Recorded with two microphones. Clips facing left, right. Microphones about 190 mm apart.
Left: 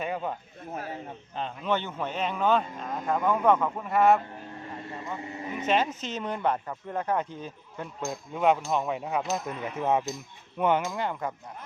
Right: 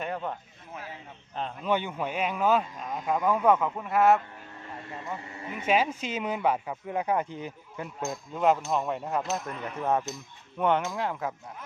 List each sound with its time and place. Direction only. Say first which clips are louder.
0.0 s a man's voice: left 1 dB; 5° left (ahead or behind)
0.7 s speech: left 6 dB; 45° left (ahead or behind)
1.4 s speech: even; centre (ahead or behind)
1.7 s speech: right 1 dB; 10° right (ahead or behind)
5.5 s speech: right 1 dB; 10° right (ahead or behind)
8.0 s speech: even; centre (ahead or behind)